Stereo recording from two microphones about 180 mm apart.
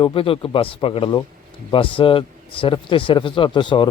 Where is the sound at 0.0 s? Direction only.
30° left (ahead or behind).